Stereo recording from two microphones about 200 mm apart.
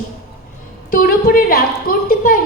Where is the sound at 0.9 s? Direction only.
45° left (ahead or behind).